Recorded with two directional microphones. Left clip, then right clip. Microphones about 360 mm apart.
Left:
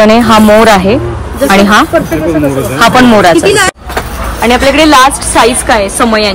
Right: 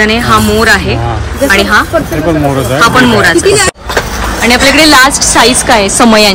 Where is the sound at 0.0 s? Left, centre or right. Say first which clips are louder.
Left 3 dB; centre.